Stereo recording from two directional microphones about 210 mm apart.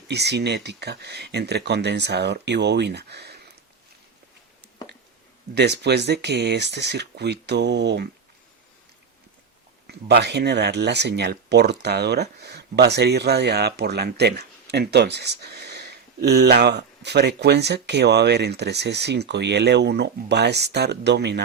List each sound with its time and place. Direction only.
0.1 s speech: 55° right (ahead or behind)
5.5 s speech: 55° right (ahead or behind)
9.8 s speech: 50° right (ahead or behind)